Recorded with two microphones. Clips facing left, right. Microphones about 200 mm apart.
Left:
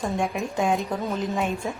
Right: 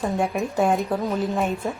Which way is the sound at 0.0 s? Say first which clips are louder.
Right 3 dB; 5° right (ahead or behind).